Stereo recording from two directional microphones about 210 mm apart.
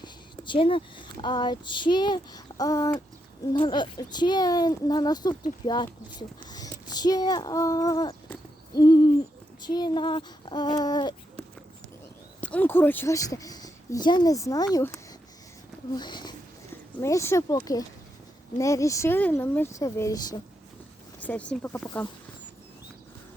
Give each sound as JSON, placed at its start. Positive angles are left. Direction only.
{"t": 0.0, "sound": "speech", "side_deg": 25}
{"t": 8.7, "sound": "hoot", "side_deg": 20}
{"t": 9.6, "sound": "speech", "side_deg": 20}
{"t": 12.4, "sound": "speech", "side_deg": 5}
{"t": 21.2, "sound": "speech", "side_deg": 5}